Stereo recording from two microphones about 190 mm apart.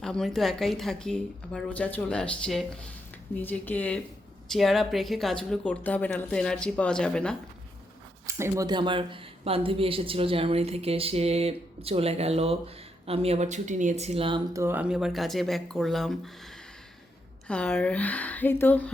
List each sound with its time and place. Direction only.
0.0 s speech: 5° left (ahead or behind)
8.3 s a woman's voice: 15° right (ahead or behind)
14.5 s speech: 10° right (ahead or behind)
17.5 s speech: 5° left (ahead or behind)